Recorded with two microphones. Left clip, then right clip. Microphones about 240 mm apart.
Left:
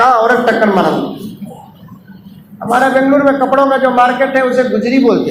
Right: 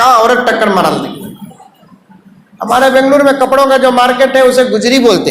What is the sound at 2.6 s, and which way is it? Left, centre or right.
A man's voice, right.